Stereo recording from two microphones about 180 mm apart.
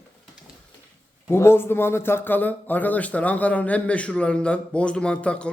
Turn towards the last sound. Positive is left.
turn(degrees=5)  # may be behind; listen again after turning